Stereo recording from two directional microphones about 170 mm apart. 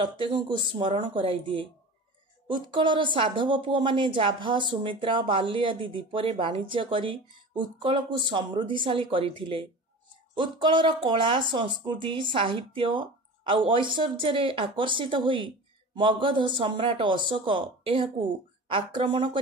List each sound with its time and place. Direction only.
0.0 s speech: 30° right (ahead or behind)